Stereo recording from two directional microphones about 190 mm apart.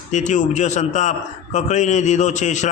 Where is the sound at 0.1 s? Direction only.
40° left (ahead or behind).